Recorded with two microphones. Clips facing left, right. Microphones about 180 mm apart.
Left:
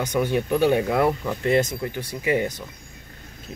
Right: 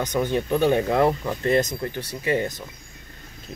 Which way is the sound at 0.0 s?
10° left (ahead or behind).